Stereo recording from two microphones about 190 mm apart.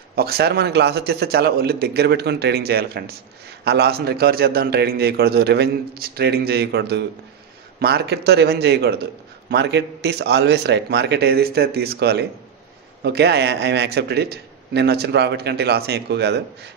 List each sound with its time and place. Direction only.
0.1 s a man's voice: 55° right (ahead or behind)